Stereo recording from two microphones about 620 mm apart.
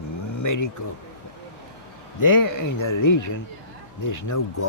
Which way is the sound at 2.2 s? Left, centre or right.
Left.